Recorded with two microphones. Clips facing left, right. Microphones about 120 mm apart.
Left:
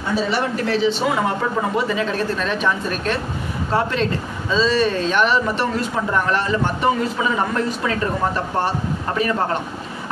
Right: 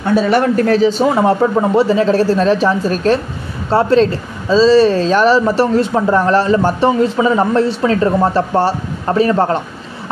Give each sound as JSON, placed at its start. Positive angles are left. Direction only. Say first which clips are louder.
{"t": 0.0, "sound": "a man's voice", "louder": "right 8 dB", "side_deg": -55}